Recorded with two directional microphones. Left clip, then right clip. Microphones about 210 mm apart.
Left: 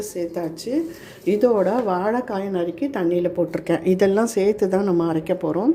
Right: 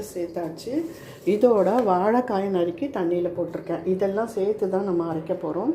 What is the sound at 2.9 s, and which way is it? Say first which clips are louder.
Speech: left 4 dB; 25° left (ahead or behind).